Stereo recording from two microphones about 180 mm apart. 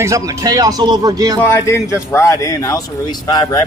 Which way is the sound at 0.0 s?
15° right (ahead or behind).